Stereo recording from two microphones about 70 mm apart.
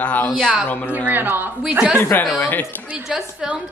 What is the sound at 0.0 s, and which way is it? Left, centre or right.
Speech, left.